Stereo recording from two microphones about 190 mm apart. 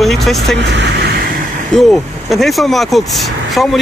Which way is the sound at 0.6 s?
65° right (ahead or behind).